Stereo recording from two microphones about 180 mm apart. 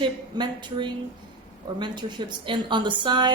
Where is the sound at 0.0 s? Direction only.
25° right (ahead or behind).